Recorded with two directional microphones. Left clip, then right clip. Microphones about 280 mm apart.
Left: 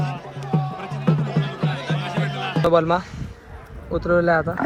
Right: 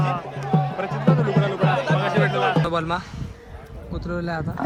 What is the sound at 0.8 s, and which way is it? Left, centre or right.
Music, centre.